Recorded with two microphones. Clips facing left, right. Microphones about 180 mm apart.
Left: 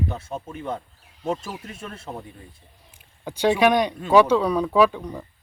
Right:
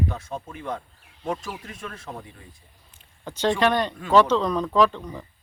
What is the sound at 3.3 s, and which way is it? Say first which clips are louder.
Speech: left 3 dB; 10° left (ahead or behind).